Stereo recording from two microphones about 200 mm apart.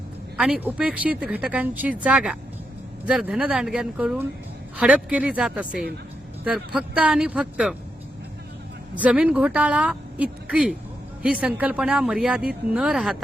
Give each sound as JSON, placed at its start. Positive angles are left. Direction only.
{"t": 0.3, "sound": "a woman's voice", "side_deg": -5}
{"t": 9.0, "sound": "a woman's voice", "side_deg": -5}